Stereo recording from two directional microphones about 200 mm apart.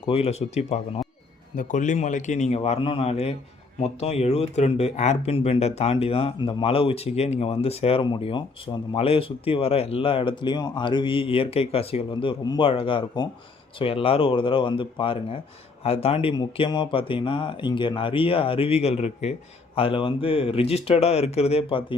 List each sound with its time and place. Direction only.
0.0 s a man's voice: 30° left (ahead or behind)